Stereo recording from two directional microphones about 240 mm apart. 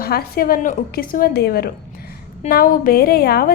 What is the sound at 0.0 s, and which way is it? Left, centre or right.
A woman's voice, left.